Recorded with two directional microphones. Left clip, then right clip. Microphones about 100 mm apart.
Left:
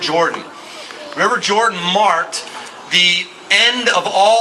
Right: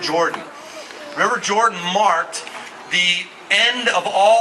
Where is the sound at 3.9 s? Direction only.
10° right (ahead or behind).